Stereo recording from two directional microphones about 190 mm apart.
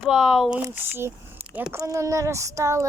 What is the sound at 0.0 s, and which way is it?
Speech, 5° right (ahead or behind).